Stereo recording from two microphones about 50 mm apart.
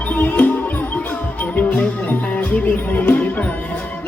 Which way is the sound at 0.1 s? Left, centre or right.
Left.